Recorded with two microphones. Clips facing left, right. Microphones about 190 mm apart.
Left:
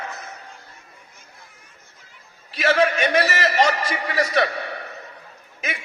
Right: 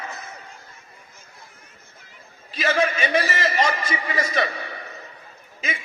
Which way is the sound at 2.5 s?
70° left (ahead or behind).